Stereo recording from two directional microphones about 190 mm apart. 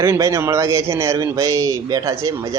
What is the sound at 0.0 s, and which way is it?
A man's voice, 15° right (ahead or behind).